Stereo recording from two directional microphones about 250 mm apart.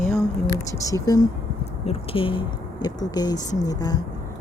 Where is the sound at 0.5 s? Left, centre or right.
Centre.